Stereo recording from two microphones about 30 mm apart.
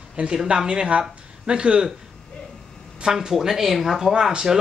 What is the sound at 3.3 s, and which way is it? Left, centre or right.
Speech, centre.